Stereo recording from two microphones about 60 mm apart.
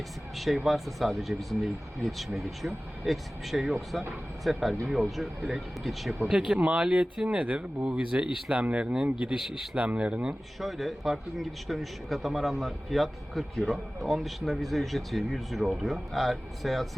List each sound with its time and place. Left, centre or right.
0.3 s speech: centre
6.2 s speech: centre
10.6 s speech: centre